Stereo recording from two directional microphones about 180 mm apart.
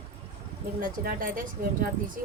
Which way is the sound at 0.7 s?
50° right (ahead or behind).